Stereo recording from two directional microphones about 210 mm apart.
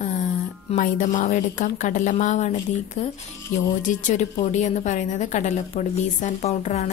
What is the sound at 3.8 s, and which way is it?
A woman's voice, 35° left (ahead or behind).